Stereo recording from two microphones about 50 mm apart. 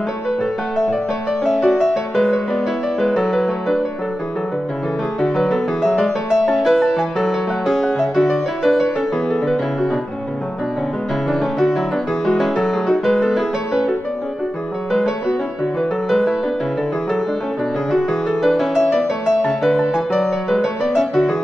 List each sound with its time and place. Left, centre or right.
1.4 s music: centre
5.2 s music: centre
11.3 s music: centre
17.9 s music: centre
19.6 s music: centre
19.9 s music: centre